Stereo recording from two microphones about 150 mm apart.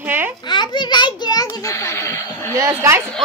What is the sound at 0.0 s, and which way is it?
Baby laughter, 15° right (ahead or behind).